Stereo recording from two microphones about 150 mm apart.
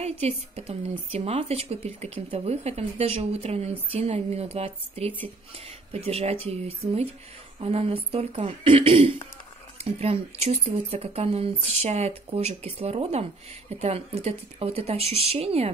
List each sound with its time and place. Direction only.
0.0 s a woman's voice: 45° right (ahead or behind)